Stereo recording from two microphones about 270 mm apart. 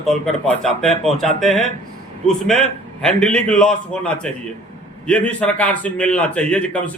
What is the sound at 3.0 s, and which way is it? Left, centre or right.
A man's voice, centre.